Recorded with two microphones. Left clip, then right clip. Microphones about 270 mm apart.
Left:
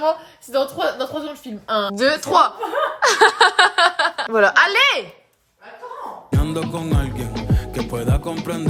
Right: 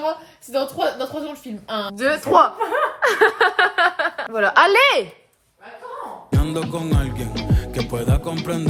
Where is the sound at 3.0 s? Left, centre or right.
Centre.